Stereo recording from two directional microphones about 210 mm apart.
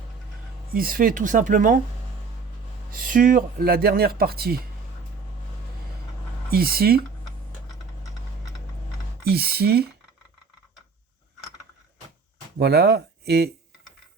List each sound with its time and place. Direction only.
0.7 s speech: 45° right (ahead or behind)
2.9 s speech: 40° right (ahead or behind)
6.5 s speech: 45° right (ahead or behind)
9.2 s speech: 50° right (ahead or behind)
12.5 s speech: 50° right (ahead or behind)